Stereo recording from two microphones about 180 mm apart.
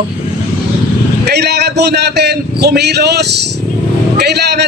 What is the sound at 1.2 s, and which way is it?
A man's voice, 65° right (ahead or behind).